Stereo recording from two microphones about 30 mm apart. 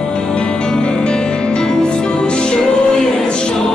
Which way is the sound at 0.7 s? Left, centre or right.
Left.